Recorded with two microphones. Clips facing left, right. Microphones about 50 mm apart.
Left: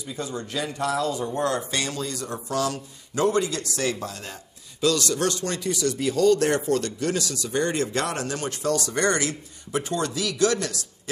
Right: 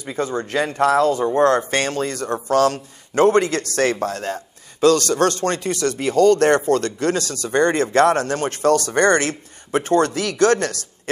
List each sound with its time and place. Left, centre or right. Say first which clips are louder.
0.0 s speech: right 8 dB; right